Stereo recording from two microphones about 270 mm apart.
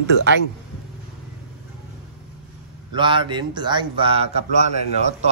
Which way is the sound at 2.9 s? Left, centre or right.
Centre.